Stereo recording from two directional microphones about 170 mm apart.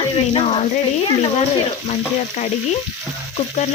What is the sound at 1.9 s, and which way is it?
Frying, 45° left (ahead or behind).